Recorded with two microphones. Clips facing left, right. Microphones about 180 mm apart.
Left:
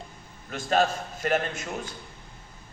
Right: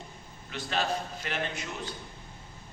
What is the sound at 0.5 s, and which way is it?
A man's voice, 45° left (ahead or behind).